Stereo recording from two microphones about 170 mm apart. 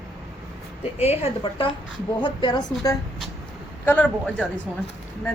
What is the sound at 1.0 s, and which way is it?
A woman's voice, 35° left (ahead or behind).